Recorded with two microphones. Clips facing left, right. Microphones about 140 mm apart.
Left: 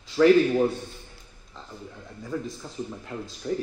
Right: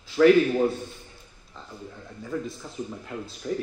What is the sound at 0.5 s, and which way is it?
Speech, centre (ahead or behind).